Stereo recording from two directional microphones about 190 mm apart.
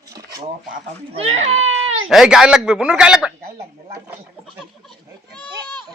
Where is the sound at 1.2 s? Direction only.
30° right (ahead or behind).